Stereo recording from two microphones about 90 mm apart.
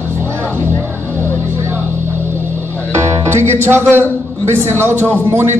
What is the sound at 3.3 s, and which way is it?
Music, 30° right (ahead or behind).